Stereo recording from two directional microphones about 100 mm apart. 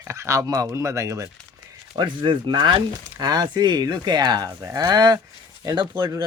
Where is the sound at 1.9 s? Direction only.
55° right (ahead or behind).